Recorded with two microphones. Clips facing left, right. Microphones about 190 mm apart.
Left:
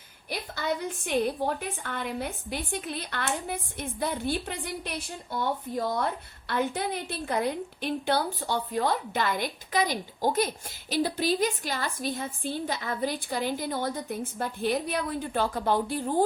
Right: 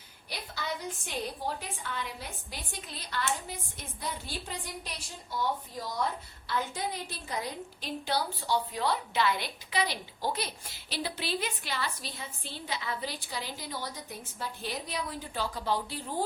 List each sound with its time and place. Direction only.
1.0 s a woman's voice: 60° left (ahead or behind)